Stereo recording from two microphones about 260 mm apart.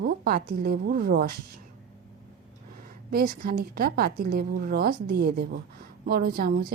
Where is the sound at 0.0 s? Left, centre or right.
Right.